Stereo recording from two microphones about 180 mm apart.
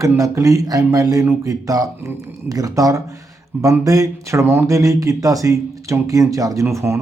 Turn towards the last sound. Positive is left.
turn(degrees=-15)  # may be behind; listen again after turning